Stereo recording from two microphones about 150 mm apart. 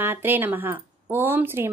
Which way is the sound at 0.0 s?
15° right (ahead or behind).